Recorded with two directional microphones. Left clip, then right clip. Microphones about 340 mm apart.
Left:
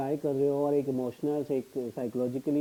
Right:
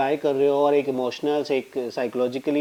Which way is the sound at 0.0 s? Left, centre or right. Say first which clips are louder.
Right 8 dB; centre.